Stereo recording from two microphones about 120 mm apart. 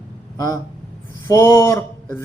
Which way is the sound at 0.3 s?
30° left (ahead or behind).